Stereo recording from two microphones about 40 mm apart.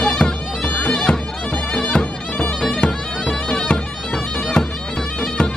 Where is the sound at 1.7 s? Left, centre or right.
Left.